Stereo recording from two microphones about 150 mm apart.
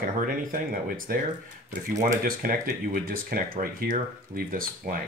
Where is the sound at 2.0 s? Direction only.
70° right (ahead or behind).